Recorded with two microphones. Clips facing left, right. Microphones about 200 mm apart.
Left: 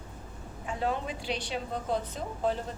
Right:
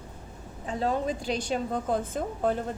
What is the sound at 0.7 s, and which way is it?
A woman's voice, 40° right (ahead or behind).